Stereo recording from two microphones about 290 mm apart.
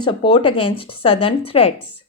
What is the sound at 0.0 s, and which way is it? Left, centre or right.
A woman's voice, centre.